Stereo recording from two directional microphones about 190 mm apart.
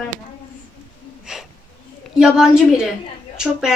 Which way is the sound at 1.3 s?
5° right (ahead or behind).